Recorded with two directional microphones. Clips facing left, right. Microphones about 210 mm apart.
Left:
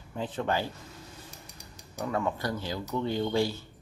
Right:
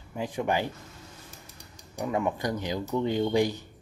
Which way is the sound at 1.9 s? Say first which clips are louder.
Right 2 dB; 15° right (ahead or behind).